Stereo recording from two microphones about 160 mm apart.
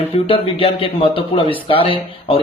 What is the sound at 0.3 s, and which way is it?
Speech, 35° left (ahead or behind).